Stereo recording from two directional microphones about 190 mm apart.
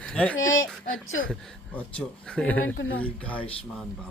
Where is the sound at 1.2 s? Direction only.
5° left (ahead or behind).